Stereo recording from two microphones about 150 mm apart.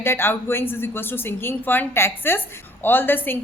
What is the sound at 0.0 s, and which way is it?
A woman's voice, 15° left (ahead or behind).